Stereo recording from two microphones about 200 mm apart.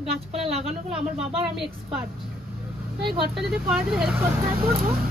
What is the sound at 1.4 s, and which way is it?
Speech, 5° right (ahead or behind).